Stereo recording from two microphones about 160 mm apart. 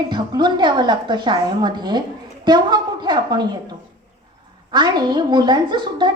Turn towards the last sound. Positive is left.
turn(degrees=-30)  # may be behind; listen again after turning